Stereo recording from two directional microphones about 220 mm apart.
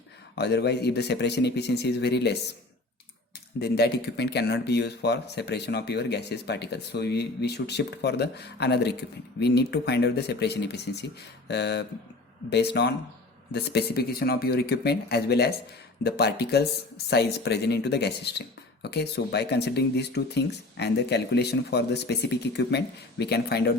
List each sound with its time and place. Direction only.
0.3 s speech: 50° left (ahead or behind)
3.6 s speech: 45° left (ahead or behind)